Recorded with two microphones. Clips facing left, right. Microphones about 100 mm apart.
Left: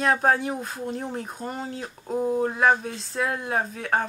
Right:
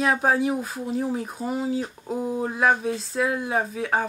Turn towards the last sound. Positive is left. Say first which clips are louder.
# right 1 dB
turn(degrees=0)  # may be behind; listen again after turning